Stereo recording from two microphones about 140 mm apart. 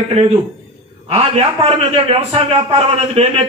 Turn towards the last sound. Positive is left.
turn(degrees=-50)  # may be behind; listen again after turning